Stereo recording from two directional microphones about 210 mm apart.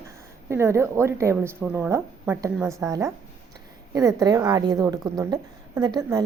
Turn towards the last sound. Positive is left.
turn(degrees=-15)  # may be behind; listen again after turning